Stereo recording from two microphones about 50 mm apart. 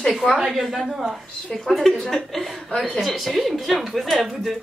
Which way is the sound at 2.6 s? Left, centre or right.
Centre.